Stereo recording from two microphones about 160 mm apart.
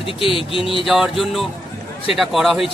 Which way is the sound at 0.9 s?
Centre (ahead or behind).